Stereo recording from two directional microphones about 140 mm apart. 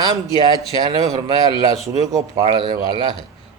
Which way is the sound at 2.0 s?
25° right (ahead or behind).